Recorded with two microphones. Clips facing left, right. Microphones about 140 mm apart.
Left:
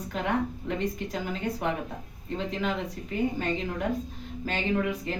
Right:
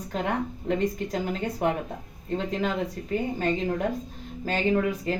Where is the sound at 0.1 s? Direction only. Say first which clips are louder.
Even; 35° right (ahead or behind).